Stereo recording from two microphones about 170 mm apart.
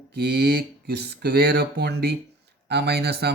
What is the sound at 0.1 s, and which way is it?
Speech, 70° right (ahead or behind).